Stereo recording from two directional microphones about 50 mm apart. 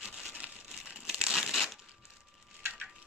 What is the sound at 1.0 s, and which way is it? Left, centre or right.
Crumpling, centre.